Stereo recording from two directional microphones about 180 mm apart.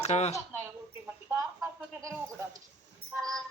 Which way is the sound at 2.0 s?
20° right (ahead or behind).